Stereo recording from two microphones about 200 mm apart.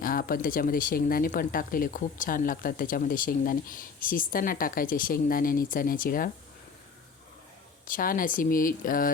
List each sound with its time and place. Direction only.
0.0 s speech: 45° left (ahead or behind)
7.9 s speech: 45° left (ahead or behind)